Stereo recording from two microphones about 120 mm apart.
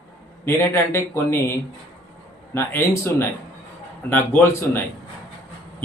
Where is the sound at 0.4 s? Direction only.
20° left (ahead or behind).